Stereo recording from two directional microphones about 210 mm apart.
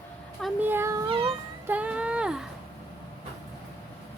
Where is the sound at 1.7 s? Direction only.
5° right (ahead or behind).